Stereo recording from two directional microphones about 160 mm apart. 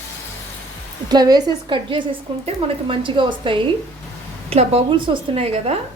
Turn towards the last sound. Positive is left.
turn(degrees=-40)  # may be behind; listen again after turning